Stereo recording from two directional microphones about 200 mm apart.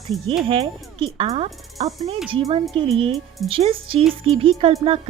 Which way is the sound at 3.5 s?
30° right (ahead or behind).